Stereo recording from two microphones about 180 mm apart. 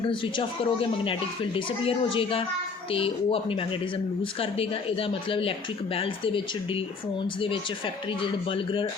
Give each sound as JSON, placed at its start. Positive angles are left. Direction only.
{"t": 0.1, "sound": "speech", "side_deg": 25}
{"t": 8.2, "sound": "speech", "side_deg": 30}